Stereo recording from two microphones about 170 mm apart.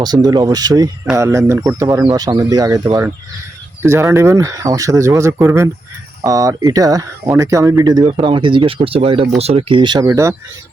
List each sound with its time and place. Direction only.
0.0 s speech: 25° right (ahead or behind)